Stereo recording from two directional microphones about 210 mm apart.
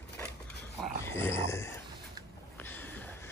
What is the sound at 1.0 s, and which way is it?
Dog, 10° left (ahead or behind).